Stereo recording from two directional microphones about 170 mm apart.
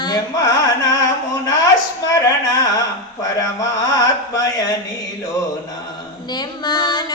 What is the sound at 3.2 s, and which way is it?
Speech, 20° left (ahead or behind).